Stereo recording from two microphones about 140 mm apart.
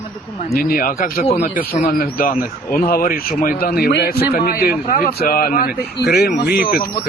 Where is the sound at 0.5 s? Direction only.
90° left.